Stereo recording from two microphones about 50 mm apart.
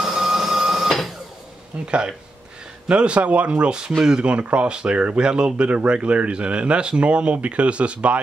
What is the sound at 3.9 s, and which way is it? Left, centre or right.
Speech, centre.